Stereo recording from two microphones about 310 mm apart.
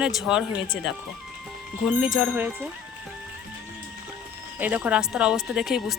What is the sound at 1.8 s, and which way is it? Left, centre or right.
Speech, centre.